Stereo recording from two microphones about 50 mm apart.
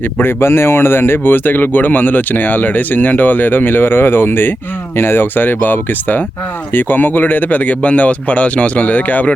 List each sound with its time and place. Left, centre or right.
0.2 s speech: left